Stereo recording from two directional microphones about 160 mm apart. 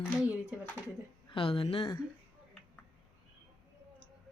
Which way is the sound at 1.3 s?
35° left (ahead or behind).